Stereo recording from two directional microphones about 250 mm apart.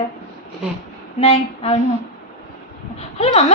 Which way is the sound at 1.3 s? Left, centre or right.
Left.